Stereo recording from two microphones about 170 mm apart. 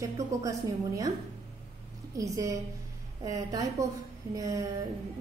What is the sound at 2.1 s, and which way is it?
A woman's voice, 20° right (ahead or behind).